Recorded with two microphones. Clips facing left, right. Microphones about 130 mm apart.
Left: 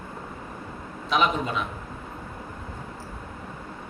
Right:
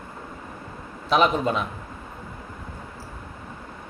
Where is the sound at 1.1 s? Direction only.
40° right (ahead or behind).